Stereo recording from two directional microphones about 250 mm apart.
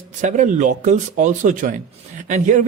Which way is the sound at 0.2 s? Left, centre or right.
Right.